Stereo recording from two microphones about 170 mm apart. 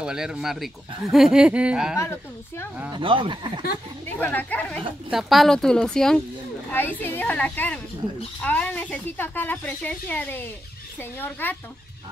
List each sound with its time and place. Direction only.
0.0 s a woman's voice: 5° right (ahead or behind)
2.0 s speech: 15° left (ahead or behind)
2.9 s speech: 30° right (ahead or behind)
4.2 s a woman's voice: 10° left (ahead or behind)